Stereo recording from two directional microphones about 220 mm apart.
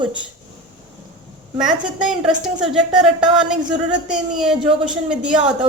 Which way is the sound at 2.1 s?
5° right (ahead or behind).